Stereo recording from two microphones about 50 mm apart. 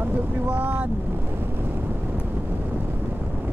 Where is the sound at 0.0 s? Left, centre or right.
Right.